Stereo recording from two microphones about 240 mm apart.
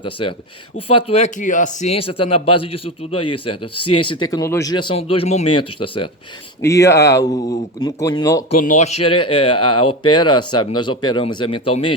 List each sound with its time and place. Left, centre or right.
0.0 s speech: left
8.6 s speech: left
9.6 s speech: left
10.1 s speech: centre